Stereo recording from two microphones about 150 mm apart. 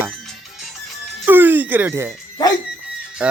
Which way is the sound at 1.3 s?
10° right (ahead or behind).